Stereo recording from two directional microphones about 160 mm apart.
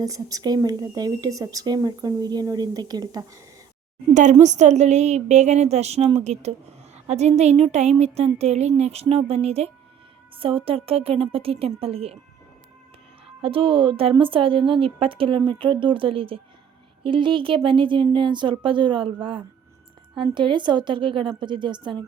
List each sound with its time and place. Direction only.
0.0 s speech: 20° right (ahead or behind)
4.1 s a woman's voice: 50° right (ahead or behind)
13.2 s speech: 35° right (ahead or behind)